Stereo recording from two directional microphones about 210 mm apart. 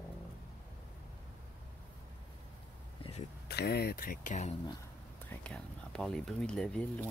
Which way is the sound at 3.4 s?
50° left (ahead or behind).